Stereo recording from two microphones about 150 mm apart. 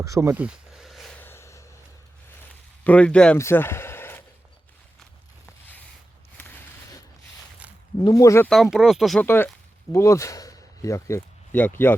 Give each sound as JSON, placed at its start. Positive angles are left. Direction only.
{"t": 0.0, "sound": "speech", "side_deg": -20}
{"t": 0.4, "sound": "a sound", "side_deg": 0}
{"t": 1.1, "sound": "vehicle", "side_deg": 15}
{"t": 2.8, "sound": "speech", "side_deg": 10}
{"t": 3.3, "sound": "a sound", "side_deg": 15}
{"t": 6.3, "sound": "a sound", "side_deg": 15}
{"t": 8.0, "sound": "speech", "side_deg": 20}
{"t": 8.4, "sound": "speech", "side_deg": 0}
{"t": 9.2, "sound": "speech", "side_deg": 15}